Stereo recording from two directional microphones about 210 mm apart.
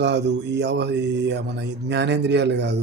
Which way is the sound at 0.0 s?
55° right (ahead or behind).